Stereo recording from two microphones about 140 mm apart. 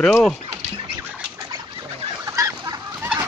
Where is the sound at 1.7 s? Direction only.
40° right (ahead or behind).